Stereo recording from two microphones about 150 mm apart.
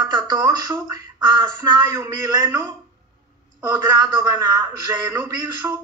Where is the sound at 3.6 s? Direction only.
25° right (ahead or behind).